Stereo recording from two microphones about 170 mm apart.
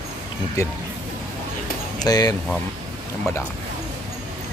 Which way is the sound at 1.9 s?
25° left (ahead or behind).